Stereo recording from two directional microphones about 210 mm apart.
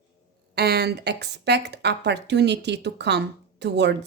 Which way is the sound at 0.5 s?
50° right (ahead or behind).